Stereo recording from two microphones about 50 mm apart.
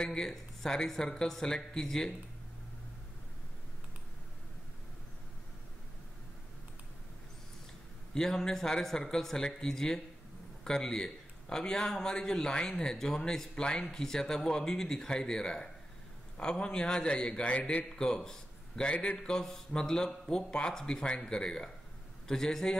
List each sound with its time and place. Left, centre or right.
0.0 s a man's voice: centre
8.1 s a man's voice: centre
17.6 s a man's voice: left
17.9 s a man's voice: centre